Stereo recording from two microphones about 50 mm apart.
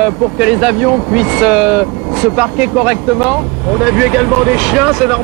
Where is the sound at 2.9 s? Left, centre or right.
Centre.